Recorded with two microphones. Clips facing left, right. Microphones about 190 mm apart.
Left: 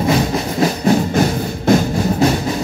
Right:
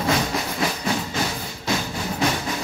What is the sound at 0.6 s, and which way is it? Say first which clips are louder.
Music: left 13 dB; 40° left (ahead or behind).